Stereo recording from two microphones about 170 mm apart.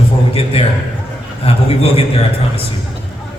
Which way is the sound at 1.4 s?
35° left (ahead or behind).